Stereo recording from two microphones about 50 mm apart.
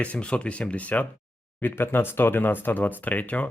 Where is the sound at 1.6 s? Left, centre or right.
Left.